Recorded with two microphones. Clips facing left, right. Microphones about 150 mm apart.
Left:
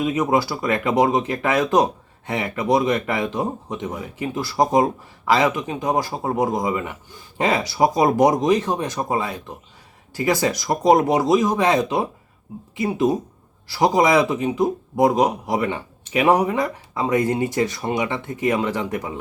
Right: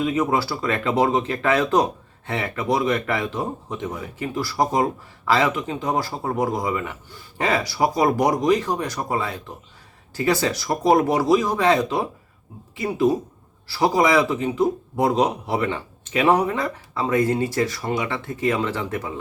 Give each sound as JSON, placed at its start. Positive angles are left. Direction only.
{"t": 0.0, "sound": "speech", "side_deg": 15}